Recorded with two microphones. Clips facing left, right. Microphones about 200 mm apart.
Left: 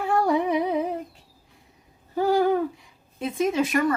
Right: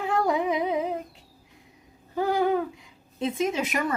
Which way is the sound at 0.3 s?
15° right (ahead or behind).